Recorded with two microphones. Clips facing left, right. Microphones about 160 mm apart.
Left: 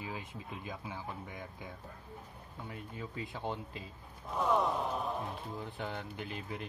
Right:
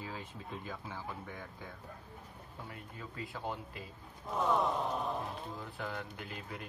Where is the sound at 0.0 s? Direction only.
15° left (ahead or behind).